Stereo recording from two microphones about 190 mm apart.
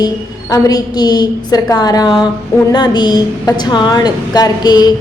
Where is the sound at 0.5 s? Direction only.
20° left (ahead or behind).